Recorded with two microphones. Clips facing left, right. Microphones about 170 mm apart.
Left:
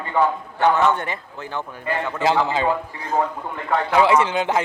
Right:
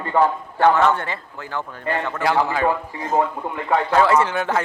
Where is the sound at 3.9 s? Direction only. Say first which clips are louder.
Left 1 dB; 15° left (ahead or behind).